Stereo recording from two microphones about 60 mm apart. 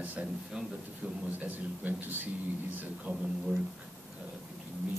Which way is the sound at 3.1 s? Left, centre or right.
Centre.